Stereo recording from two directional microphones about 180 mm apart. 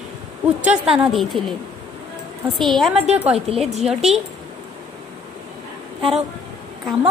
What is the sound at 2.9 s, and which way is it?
Speech, 35° right (ahead or behind).